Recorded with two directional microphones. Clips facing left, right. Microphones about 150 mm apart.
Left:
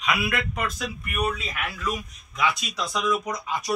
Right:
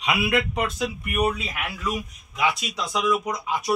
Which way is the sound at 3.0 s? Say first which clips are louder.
Right 2 dB; 10° right (ahead or behind).